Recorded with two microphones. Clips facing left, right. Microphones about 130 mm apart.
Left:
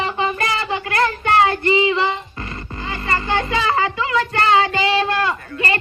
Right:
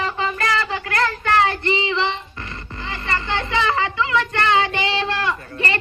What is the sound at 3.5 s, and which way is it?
Child singing, 30° left (ahead or behind).